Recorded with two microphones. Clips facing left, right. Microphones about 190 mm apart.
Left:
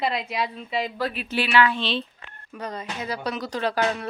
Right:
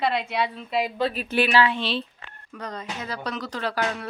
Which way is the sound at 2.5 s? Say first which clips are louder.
Left 1 dB; 10° left (ahead or behind).